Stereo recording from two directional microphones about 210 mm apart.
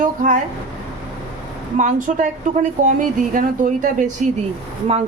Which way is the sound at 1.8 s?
35° right (ahead or behind).